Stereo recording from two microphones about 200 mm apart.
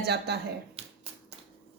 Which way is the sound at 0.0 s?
55° right (ahead or behind).